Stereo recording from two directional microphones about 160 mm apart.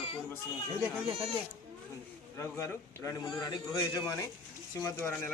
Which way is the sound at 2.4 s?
15° left (ahead or behind).